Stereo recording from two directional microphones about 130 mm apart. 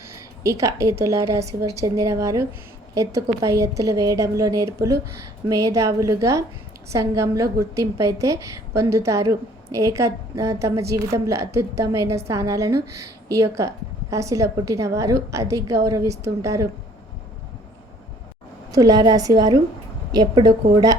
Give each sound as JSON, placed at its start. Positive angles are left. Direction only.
{"t": 0.4, "sound": "a woman's voice", "side_deg": -25}
{"t": 18.7, "sound": "a woman's voice", "side_deg": -30}